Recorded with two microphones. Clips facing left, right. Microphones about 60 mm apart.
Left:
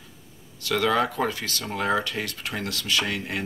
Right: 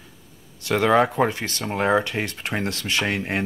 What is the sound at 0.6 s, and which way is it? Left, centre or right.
Speech, right.